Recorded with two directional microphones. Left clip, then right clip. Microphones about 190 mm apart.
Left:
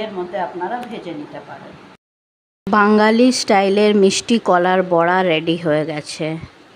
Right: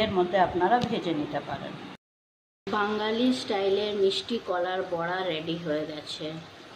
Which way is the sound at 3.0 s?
70° left (ahead or behind).